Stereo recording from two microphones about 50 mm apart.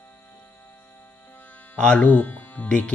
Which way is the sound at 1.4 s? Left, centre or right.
Left.